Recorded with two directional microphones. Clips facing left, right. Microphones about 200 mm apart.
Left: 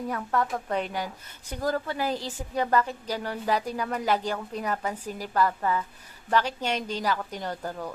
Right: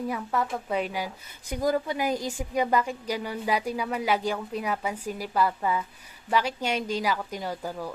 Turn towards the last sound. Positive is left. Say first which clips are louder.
# right 1 dB
turn(degrees=-10)  # may be behind; listen again after turning